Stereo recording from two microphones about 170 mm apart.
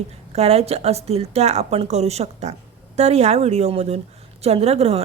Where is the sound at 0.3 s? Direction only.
40° right (ahead or behind).